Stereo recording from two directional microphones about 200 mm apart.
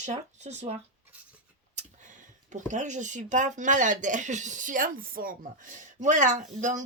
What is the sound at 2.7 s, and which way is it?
Speech, 40° right (ahead or behind).